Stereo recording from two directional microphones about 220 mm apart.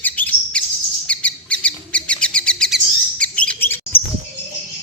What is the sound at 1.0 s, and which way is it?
Bird, 5° left (ahead or behind).